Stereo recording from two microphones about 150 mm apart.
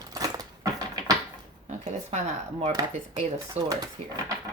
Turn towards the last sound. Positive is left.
turn(degrees=-25)  # may be behind; listen again after turning